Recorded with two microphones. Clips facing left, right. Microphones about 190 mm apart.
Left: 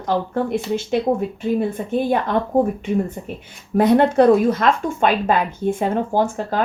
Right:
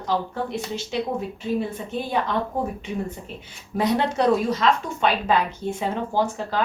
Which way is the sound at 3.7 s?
55° left (ahead or behind).